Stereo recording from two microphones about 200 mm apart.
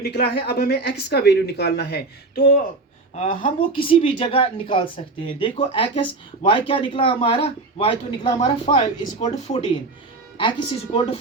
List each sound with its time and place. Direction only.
0.0 s speech: 55° left (ahead or behind)
3.2 s speech: 25° left (ahead or behind)
10.9 s speech: 25° left (ahead or behind)